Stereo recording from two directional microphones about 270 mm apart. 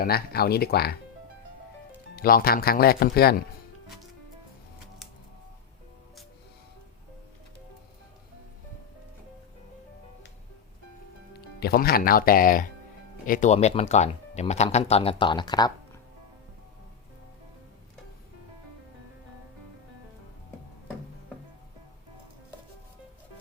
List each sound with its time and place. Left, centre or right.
0.0 s speech: left
2.1 s speech: left
11.3 s speech: left; by 15.7 s centre